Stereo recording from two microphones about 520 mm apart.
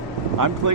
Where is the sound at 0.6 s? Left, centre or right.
Right.